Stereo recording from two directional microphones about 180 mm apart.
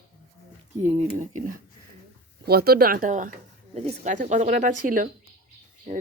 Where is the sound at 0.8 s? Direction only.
40° right (ahead or behind).